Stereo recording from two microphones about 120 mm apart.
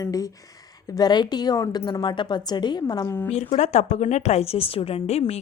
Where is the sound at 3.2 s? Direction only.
65° left (ahead or behind).